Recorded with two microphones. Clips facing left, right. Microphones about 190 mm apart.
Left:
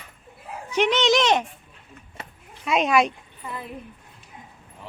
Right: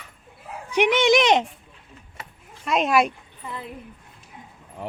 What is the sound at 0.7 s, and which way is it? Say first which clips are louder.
Speech: right 2 dB; 15° right (ahead or behind).